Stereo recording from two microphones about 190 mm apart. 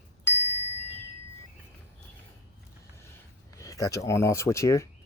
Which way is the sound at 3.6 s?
15° left (ahead or behind).